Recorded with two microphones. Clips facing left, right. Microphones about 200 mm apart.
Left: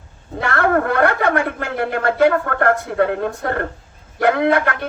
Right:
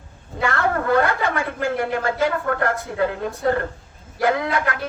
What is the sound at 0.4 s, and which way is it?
A man's voice, 60° left (ahead or behind).